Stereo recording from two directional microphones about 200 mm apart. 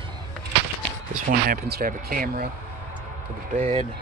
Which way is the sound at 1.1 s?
45° right (ahead or behind).